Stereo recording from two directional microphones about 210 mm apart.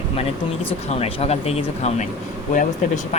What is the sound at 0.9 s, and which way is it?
Speech, 30° left (ahead or behind).